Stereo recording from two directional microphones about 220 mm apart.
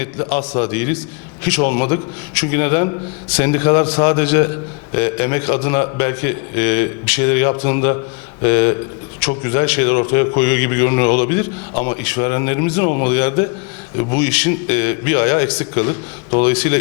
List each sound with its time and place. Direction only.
0.0 s a man's voice: 15° left (ahead or behind)